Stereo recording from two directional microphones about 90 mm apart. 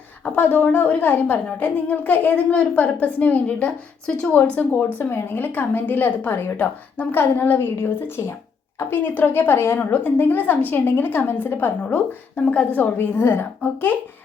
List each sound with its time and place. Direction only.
0.3 s a woman's voice: 20° left (ahead or behind)